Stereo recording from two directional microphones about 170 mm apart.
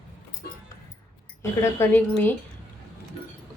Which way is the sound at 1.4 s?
15° left (ahead or behind).